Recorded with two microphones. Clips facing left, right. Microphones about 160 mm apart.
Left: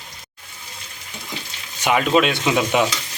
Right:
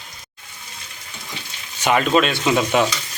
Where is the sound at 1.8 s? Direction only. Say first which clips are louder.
Even; 10° left (ahead or behind).